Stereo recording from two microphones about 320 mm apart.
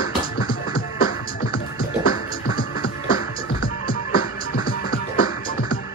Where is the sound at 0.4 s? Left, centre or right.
Left.